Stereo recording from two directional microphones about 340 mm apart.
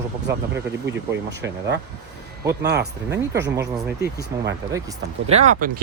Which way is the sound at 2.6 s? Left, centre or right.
Right.